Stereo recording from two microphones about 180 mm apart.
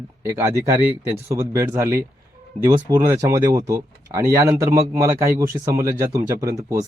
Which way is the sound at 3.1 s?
15° right (ahead or behind).